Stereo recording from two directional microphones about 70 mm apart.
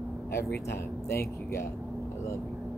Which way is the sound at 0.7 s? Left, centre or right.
Left.